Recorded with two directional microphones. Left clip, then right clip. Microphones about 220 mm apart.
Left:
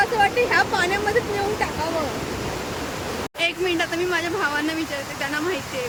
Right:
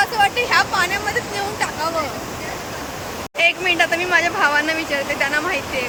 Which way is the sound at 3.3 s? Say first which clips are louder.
Right 7 dB; 5° left (ahead or behind).